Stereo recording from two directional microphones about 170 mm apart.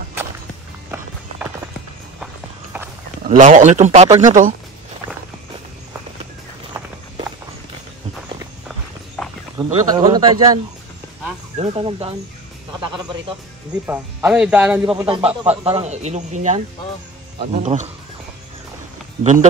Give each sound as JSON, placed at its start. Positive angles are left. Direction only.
{"t": 3.3, "sound": "a man's voice", "side_deg": -45}
{"t": 8.6, "sound": "walk", "side_deg": 5}
{"t": 9.6, "sound": "speech", "side_deg": -20}
{"t": 11.5, "sound": "speech", "side_deg": -35}
{"t": 13.8, "sound": "speech", "side_deg": -10}
{"t": 15.0, "sound": "speech", "side_deg": -30}